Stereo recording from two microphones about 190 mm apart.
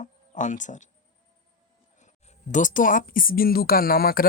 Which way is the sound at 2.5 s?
40° left (ahead or behind).